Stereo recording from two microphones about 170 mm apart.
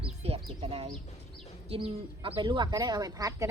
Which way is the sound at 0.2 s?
35° right (ahead or behind).